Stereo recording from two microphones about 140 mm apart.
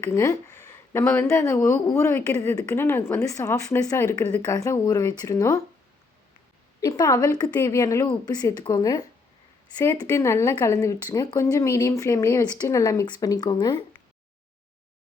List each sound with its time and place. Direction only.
0.0 s speech: 20° left (ahead or behind)
4.4 s speech: 20° left (ahead or behind)
6.8 s speech: 25° left (ahead or behind)